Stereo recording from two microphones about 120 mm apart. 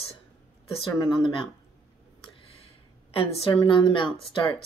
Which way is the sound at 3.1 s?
50° left (ahead or behind).